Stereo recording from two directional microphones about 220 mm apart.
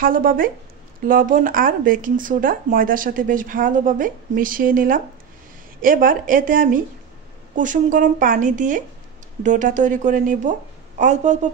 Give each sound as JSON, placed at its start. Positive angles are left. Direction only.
{"t": 0.0, "sound": "speech", "side_deg": -40}